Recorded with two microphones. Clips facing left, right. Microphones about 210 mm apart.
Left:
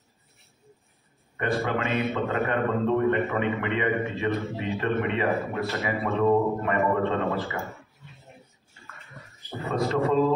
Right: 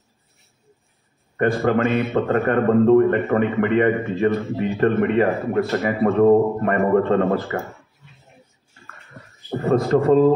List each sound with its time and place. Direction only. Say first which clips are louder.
1.3 s a man's voice: right 8 dB; 50° right (ahead or behind)
9.5 s a man's voice: right 9 dB; 50° right (ahead or behind)